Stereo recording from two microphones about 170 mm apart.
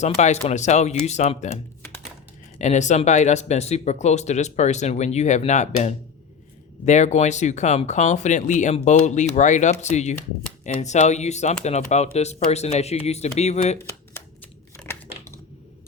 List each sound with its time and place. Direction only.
0.0 s speech: 40° left (ahead or behind)
2.6 s speech: 45° left (ahead or behind)
14.8 s a sound: 10° left (ahead or behind)